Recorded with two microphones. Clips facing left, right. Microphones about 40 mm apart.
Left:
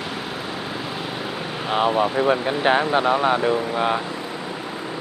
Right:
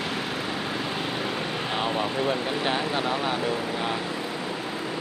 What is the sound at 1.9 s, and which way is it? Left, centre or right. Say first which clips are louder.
Speech: left 7 dB; centre.